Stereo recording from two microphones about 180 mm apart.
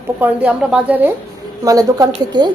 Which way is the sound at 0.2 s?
10° right (ahead or behind).